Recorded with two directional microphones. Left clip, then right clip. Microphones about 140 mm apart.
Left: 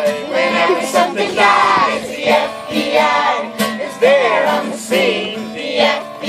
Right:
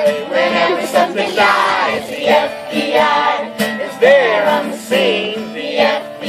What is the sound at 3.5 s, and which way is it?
Music, 25° right (ahead or behind).